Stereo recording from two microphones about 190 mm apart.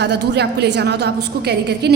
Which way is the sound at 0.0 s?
60° right (ahead or behind).